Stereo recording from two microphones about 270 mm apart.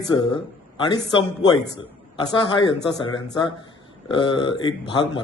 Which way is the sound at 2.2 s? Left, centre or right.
Centre.